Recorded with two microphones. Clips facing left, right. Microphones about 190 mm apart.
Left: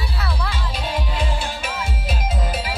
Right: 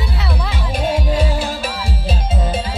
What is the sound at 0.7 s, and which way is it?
Music, 50° right (ahead or behind).